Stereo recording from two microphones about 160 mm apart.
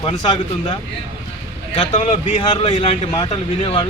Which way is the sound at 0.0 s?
30° left (ahead or behind).